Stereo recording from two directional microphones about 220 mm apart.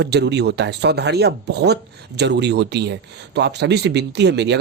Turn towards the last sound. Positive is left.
turn(degrees=-50)  # may be behind; listen again after turning